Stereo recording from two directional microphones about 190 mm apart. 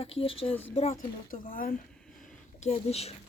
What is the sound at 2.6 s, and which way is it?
Speech, 35° left (ahead or behind).